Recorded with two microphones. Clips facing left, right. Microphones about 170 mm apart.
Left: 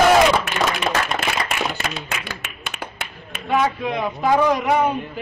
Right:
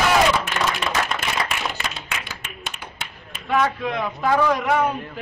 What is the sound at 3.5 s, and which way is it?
A man's voice, 5° left (ahead or behind).